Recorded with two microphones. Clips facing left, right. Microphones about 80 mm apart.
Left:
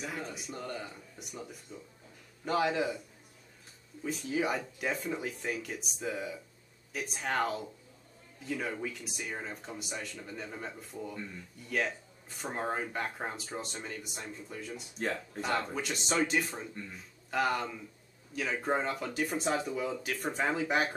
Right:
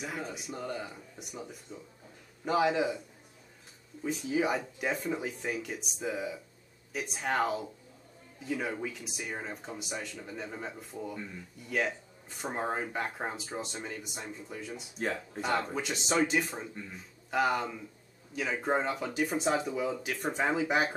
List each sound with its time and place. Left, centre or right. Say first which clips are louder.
0.0 s speech: right 1 dB; centre
4.1 s speech: right 2 dB; centre